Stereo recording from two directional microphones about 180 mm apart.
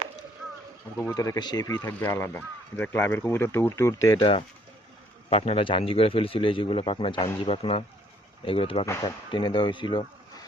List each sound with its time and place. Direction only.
0.9 s speech: 15° left (ahead or behind)
1.9 s a man's voice: 10° left (ahead or behind); by 8.9 s 30° left (ahead or behind)
8.9 s speech: 20° left (ahead or behind)